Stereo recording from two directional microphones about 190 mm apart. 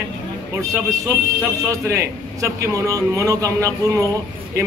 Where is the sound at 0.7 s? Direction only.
15° right (ahead or behind).